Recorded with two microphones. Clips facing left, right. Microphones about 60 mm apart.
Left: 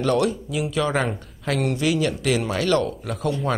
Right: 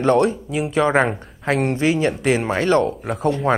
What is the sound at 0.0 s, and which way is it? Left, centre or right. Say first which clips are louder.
Speech: right 4 dB; right.